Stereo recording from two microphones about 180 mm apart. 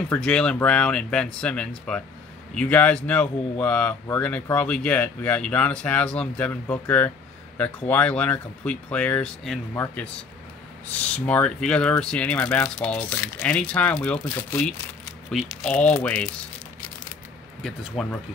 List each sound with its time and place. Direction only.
0.1 s speech: 5° left (ahead or behind)
17.6 s speech: centre (ahead or behind)